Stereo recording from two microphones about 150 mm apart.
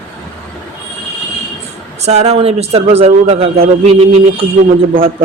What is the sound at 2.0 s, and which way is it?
A man's voice, 45° right (ahead or behind).